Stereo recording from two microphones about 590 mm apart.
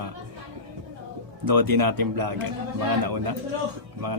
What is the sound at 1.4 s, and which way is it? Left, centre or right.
A man's voice, right.